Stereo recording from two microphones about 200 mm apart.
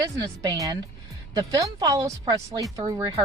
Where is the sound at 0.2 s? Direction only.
15° right (ahead or behind).